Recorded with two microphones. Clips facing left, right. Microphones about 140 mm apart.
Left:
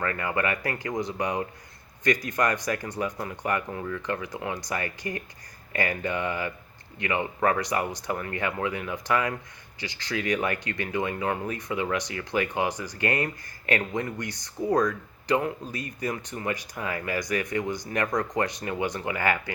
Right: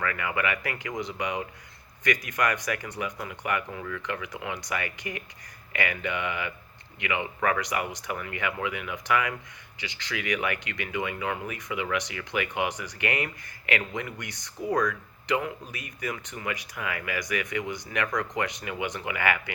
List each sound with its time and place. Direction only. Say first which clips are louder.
0.0 s speech: left 2 dB; 35° left (ahead or behind)